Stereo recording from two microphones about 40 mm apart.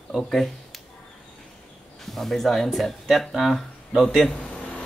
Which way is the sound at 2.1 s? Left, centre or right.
Centre.